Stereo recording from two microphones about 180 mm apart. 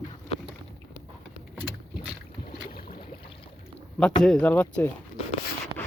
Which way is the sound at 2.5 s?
55° left (ahead or behind).